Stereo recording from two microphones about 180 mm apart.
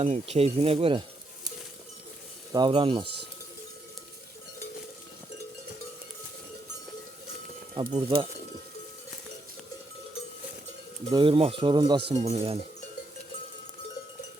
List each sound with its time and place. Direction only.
0.0 s speech: 35° right (ahead or behind)
2.5 s speech: 25° right (ahead or behind)
7.9 s speech: 30° right (ahead or behind)
11.1 s speech: 30° right (ahead or behind)
12.1 s speech: 35° right (ahead or behind)